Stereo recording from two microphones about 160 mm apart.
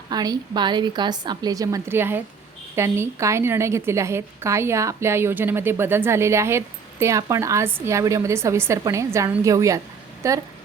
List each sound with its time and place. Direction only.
0.1 s a woman's voice: 25° right (ahead or behind)